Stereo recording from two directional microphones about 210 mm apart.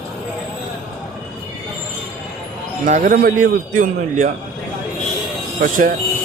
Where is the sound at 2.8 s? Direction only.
35° right (ahead or behind).